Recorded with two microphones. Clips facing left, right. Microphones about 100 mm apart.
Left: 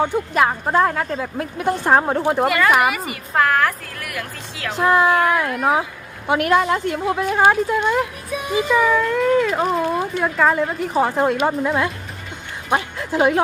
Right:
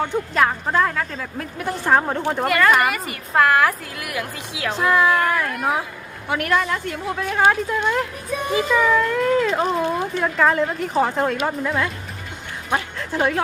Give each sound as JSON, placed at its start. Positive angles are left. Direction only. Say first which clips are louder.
{"t": 0.0, "sound": "speech", "louder": "left 2 dB", "side_deg": 15}
{"t": 0.9, "sound": "speech", "louder": "left 4 dB", "side_deg": 30}
{"t": 4.8, "sound": "speech", "louder": "left 3 dB", "side_deg": 20}
{"t": 5.0, "sound": "speech", "louder": "left 2 dB", "side_deg": 5}
{"t": 6.2, "sound": "speech", "louder": "left 4 dB", "side_deg": 20}
{"t": 7.3, "sound": "speech", "louder": "left 1 dB", "side_deg": 10}
{"t": 13.0, "sound": "speech", "louder": "left 5 dB", "side_deg": 15}